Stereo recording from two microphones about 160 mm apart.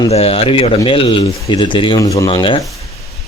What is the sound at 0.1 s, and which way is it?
Speech, 35° left (ahead or behind).